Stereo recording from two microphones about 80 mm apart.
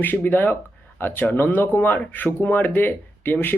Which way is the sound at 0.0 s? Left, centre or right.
Left.